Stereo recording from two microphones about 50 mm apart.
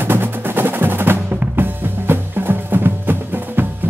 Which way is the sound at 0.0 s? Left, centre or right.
Right.